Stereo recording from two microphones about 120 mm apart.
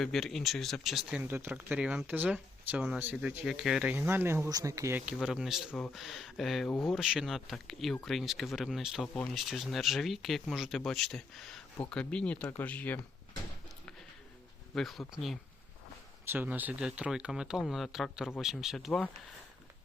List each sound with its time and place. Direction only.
0.0 s speech: 5° left (ahead or behind)
1.2 s speech: 15° right (ahead or behind)
5.0 s speech: 5° right (ahead or behind); by 13.0 s 15° left (ahead or behind)
14.8 s speech: centre (ahead or behind)
16.2 s speech: 15° right (ahead or behind); by 19.0 s centre (ahead or behind)